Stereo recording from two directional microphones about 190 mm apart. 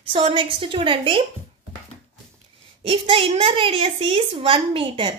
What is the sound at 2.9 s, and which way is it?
A woman's voice, 30° right (ahead or behind).